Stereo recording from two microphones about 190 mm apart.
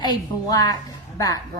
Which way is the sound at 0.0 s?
20° left (ahead or behind).